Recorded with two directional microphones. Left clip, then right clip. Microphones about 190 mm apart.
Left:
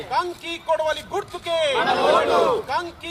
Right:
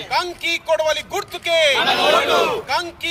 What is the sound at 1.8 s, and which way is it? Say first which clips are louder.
Speech: right 2 dB; 25° right (ahead or behind).